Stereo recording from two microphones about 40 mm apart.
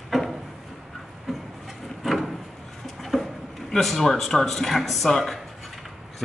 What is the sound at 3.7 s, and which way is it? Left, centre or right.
Speech, centre.